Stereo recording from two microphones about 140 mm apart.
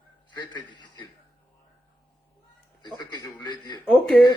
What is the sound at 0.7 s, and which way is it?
Speech, 30° left (ahead or behind).